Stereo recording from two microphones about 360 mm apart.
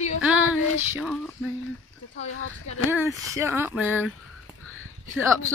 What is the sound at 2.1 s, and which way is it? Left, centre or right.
Speech, left.